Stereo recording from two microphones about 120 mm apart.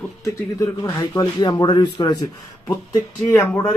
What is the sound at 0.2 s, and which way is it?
Speech, 30° left (ahead or behind).